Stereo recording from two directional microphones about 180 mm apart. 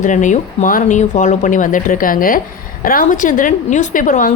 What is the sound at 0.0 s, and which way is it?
A woman's voice, 45° left (ahead or behind).